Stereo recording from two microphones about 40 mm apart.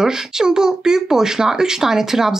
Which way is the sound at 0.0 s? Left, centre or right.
Centre.